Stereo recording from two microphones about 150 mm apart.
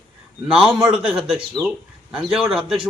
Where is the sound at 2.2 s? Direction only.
Centre (ahead or behind).